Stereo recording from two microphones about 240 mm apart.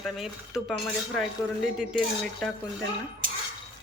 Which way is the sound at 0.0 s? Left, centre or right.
Centre.